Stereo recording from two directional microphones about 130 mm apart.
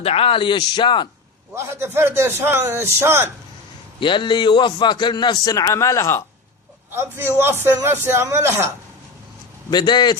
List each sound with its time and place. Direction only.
0.0 s a man's voice: 50° left (ahead or behind)
1.5 s a man's voice: 20° right (ahead or behind)
4.0 s a man's voice: 40° left (ahead or behind); by 6.2 s 20° left (ahead or behind)
6.9 s a man's voice: 20° right (ahead or behind)
9.6 s a man's voice: 35° left (ahead or behind)